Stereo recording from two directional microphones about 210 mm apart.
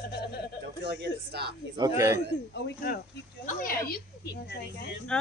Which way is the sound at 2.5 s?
50° left (ahead or behind).